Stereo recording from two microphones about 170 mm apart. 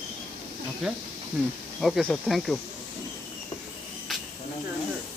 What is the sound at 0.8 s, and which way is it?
Speech, centre (ahead or behind).